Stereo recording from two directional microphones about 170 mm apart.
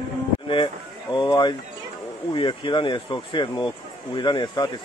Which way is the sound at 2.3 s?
30° left (ahead or behind).